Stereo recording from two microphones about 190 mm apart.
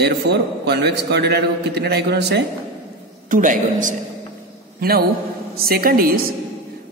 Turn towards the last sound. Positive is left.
turn(degrees=-50)  # may be behind; listen again after turning